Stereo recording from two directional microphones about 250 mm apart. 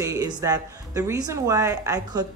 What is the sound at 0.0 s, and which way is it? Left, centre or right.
Speech, centre.